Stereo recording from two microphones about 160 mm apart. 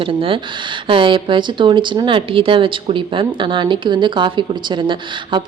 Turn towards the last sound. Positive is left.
turn(degrees=-30)  # may be behind; listen again after turning